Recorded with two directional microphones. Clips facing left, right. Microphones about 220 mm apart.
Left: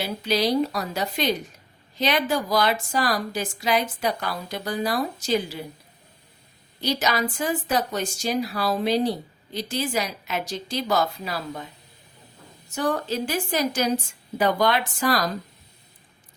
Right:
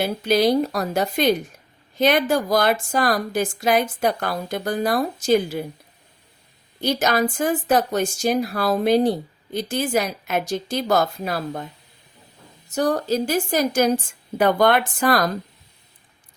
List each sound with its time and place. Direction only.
0.0 s a woman's voice: 50° right (ahead or behind)
6.8 s a woman's voice: 50° right (ahead or behind)
12.7 s a woman's voice: 40° right (ahead or behind)